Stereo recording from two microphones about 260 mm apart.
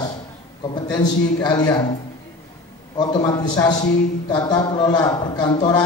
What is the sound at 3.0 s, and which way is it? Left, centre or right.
Speech, centre.